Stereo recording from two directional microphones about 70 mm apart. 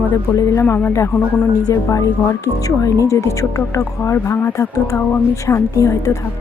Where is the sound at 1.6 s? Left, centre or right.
Left.